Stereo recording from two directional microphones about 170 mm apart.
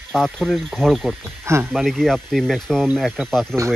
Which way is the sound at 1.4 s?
15° right (ahead or behind).